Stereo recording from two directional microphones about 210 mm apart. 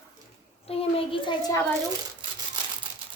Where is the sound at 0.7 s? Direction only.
30° left (ahead or behind).